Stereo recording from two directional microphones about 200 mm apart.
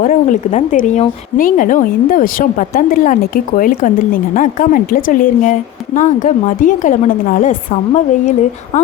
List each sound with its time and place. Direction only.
0.0 s speech: 40° left (ahead or behind)